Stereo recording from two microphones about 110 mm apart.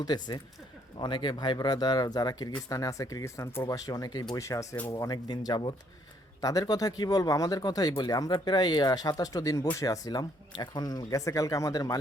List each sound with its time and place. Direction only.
0.0 s speech: 40° left (ahead or behind)